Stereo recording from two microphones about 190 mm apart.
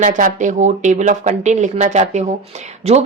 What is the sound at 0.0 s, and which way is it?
Speech, 45° right (ahead or behind).